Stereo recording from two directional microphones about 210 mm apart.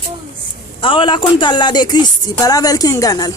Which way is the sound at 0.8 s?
25° left (ahead or behind).